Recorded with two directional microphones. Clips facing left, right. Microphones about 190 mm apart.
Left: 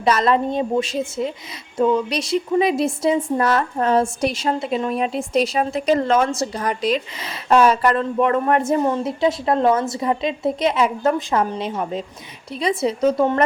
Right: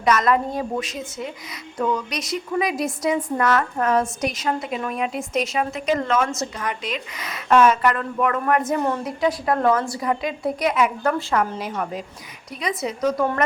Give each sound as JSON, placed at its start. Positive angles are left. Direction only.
{"t": 0.0, "sound": "speech", "side_deg": 30}